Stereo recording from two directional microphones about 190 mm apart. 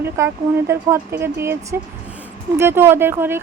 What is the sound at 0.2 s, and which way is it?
Speech, 15° right (ahead or behind).